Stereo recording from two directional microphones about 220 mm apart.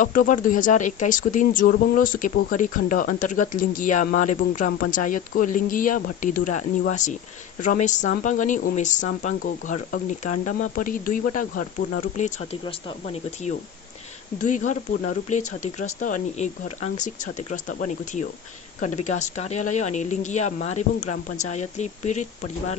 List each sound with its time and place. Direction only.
0.0 s speech: 35° left (ahead or behind)